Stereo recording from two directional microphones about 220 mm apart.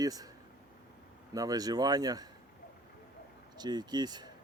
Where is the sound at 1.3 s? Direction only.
15° right (ahead or behind).